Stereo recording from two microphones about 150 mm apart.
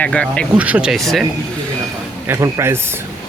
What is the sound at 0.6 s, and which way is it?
Speech, 10° right (ahead or behind).